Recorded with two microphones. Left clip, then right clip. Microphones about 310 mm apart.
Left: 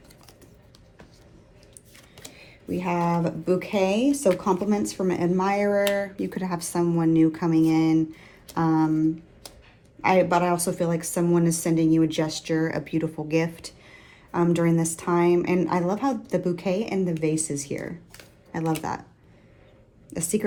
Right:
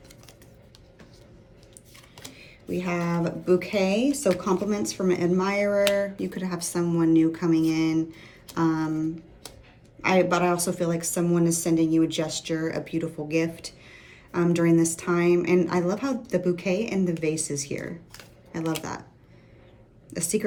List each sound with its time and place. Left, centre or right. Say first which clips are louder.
2.3 s computer keyboard: even; centre
3.0 s speech: left 3 dB; centre
5.0 s speech: even; centre
20.1 s a woman's voice: even; centre